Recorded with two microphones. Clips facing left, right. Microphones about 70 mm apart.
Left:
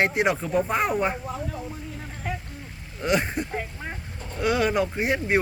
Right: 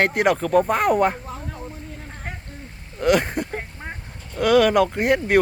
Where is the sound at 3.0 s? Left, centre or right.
Right.